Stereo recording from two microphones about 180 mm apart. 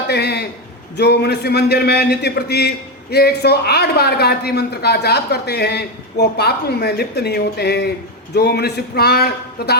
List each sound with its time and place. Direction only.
0.1 s a man's voice: 65° left (ahead or behind)